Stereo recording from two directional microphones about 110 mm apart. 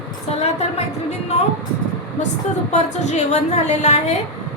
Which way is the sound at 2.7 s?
90° left.